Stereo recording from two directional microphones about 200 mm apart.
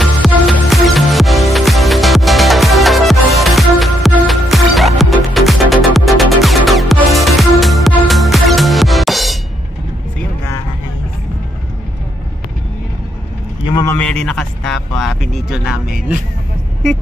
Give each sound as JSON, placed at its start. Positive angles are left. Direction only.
{"t": 0.0, "sound": "music", "side_deg": 0}
{"t": 13.7, "sound": "a sound", "side_deg": 20}
{"t": 13.9, "sound": "vehicle", "side_deg": 5}